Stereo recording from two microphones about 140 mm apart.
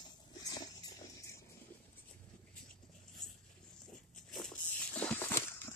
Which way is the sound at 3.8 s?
Centre (ahead or behind).